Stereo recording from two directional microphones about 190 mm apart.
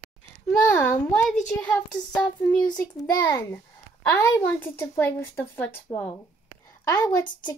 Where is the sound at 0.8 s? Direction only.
15° left (ahead or behind).